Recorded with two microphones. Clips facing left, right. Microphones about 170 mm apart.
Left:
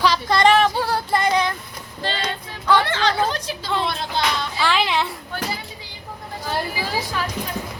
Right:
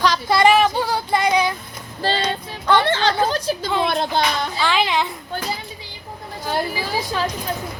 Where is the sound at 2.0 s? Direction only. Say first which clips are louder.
Right 5 dB; 35° right (ahead or behind).